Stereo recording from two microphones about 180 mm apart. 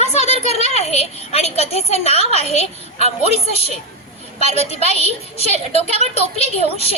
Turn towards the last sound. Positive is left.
turn(degrees=35)  # may be behind; listen again after turning